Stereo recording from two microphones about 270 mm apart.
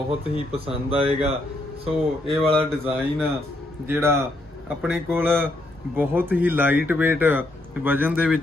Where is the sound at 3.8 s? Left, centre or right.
Centre.